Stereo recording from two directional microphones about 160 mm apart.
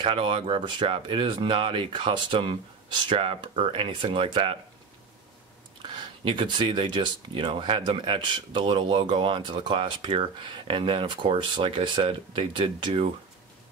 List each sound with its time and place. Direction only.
0.0 s speech: 35° right (ahead or behind)
5.8 s speech: 30° right (ahead or behind)